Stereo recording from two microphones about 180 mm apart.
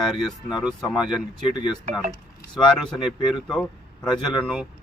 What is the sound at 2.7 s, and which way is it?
Speech, centre (ahead or behind).